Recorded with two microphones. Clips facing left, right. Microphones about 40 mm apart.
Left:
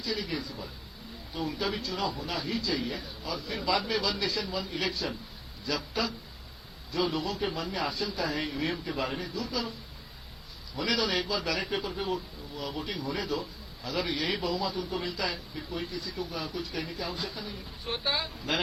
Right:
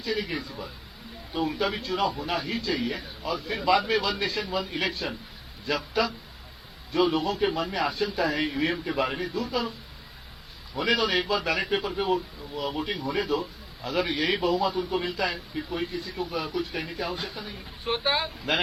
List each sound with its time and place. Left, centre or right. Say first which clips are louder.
0.0 s a man's voice: right 4 dB; right
10.8 s a man's voice: right 4 dB; right